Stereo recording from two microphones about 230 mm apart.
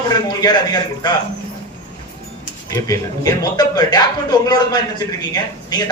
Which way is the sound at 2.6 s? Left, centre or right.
Centre.